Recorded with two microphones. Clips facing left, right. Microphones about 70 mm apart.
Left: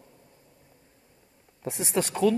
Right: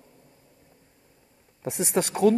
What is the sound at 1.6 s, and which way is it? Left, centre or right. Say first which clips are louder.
Speech: right 2 dB; right.